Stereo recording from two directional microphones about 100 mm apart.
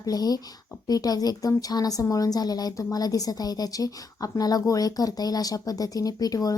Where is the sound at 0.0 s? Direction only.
40° left (ahead or behind).